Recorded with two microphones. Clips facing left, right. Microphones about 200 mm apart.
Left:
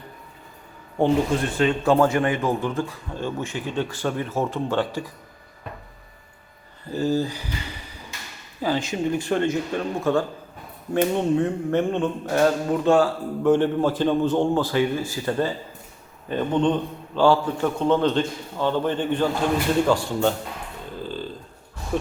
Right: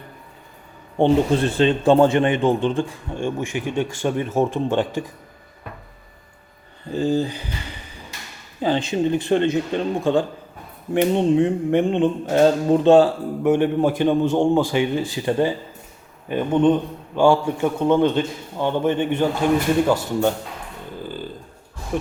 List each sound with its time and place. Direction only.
0.9 s a man's voice: 30° right (ahead or behind)
6.9 s a man's voice: 15° right (ahead or behind)
8.6 s a man's voice: 25° right (ahead or behind)
21.0 s burping: 10° right (ahead or behind)